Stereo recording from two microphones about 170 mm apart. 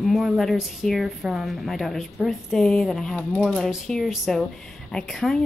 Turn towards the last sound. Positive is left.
turn(degrees=0)  # may be behind; listen again after turning